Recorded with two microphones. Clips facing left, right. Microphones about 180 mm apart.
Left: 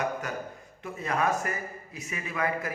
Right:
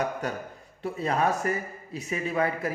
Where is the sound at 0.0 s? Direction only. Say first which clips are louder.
Right 2 dB; 35° right (ahead or behind).